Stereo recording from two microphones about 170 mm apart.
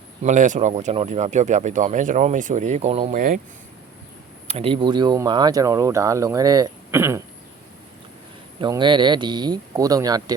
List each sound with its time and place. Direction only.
0.2 s speech: 45° right (ahead or behind)
4.4 s speech: 35° right (ahead or behind); by 7.2 s 15° right (ahead or behind)
8.6 s speech: 25° right (ahead or behind)